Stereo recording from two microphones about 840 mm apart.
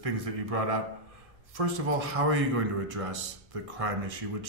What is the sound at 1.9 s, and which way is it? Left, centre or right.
Speech, right.